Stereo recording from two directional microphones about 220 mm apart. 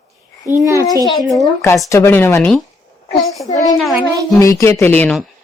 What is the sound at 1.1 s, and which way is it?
Speech, centre (ahead or behind).